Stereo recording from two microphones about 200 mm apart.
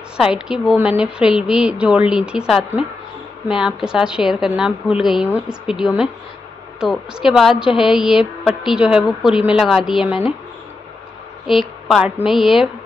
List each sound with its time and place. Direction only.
0.2 s a woman's voice: 5° right (ahead or behind)
11.4 s a woman's voice: centre (ahead or behind)